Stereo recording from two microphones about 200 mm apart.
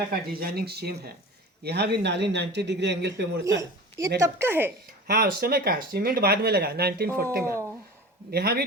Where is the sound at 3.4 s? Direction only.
15° right (ahead or behind).